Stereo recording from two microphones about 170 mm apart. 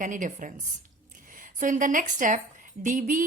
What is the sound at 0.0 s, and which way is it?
A woman's voice, 50° right (ahead or behind).